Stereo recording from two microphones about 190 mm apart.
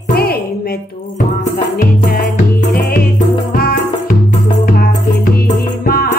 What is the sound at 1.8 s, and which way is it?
Music, 45° left (ahead or behind).